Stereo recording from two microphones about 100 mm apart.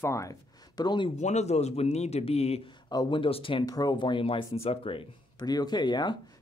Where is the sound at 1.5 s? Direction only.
90° left.